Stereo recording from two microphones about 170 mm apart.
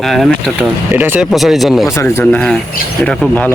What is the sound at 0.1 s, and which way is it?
Speech, centre (ahead or behind).